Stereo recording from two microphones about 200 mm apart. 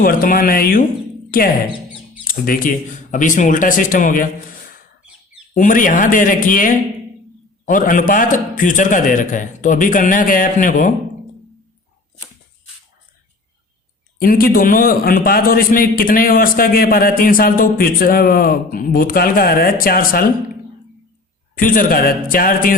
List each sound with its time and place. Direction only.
0.0 s a man's voice: 45° left (ahead or behind)
5.5 s a man's voice: 40° left (ahead or behind)
14.2 s a man's voice: 50° left (ahead or behind)
21.5 s a man's voice: 45° left (ahead or behind)